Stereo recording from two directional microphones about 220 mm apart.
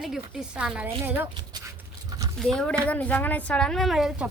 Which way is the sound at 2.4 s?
5° left (ahead or behind).